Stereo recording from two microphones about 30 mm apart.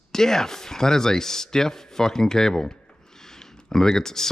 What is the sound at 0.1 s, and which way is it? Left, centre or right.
Speech, centre.